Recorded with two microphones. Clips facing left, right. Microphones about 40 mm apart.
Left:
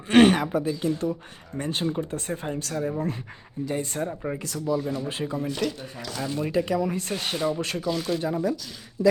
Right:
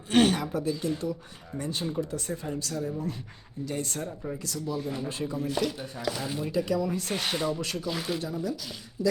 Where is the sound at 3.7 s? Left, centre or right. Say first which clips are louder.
Left 5 dB; centre.